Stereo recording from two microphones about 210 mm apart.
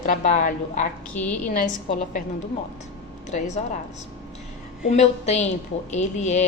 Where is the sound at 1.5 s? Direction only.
40° left (ahead or behind).